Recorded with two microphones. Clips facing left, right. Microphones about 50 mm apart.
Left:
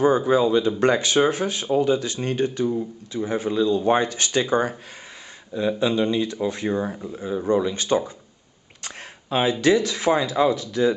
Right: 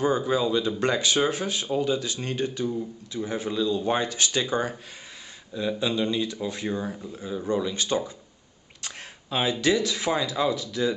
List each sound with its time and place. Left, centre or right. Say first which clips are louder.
0.0 s speech: left 6 dB; left